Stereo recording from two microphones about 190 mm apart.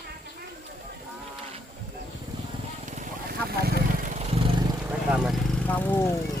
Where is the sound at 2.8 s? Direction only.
40° right (ahead or behind).